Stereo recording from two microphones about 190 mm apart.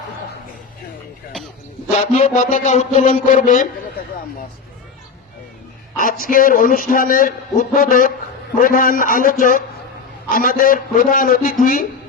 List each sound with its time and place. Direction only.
2.1 s a man's voice: 40° left (ahead or behind)
6.0 s a man's voice: 45° left (ahead or behind)